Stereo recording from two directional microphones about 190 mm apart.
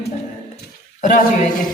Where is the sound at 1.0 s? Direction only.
40° left (ahead or behind).